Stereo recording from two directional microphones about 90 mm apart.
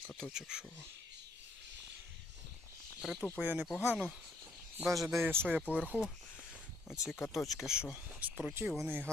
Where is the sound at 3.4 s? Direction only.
20° right (ahead or behind).